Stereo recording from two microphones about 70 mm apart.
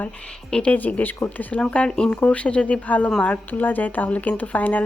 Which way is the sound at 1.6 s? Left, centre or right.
Centre.